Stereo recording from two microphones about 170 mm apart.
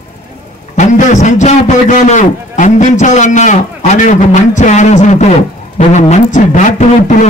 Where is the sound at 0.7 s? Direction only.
45° left (ahead or behind).